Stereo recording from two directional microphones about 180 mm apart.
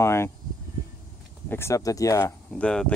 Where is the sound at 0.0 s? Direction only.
15° left (ahead or behind).